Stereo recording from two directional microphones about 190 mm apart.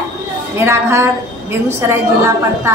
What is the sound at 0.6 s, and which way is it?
Speech, 15° right (ahead or behind).